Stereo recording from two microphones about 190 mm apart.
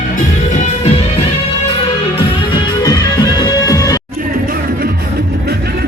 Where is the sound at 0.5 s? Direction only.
40° left (ahead or behind).